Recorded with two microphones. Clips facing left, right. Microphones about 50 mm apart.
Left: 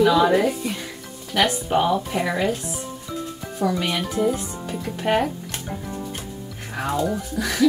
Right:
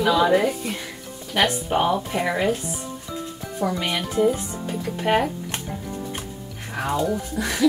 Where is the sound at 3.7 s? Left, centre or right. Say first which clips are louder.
Left 2 dB; centre.